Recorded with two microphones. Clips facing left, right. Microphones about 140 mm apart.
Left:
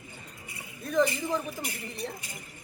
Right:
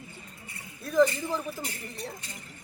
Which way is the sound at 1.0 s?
15° left (ahead or behind).